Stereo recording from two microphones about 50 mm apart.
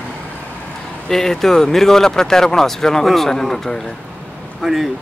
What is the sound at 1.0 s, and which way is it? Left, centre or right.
Speech, centre.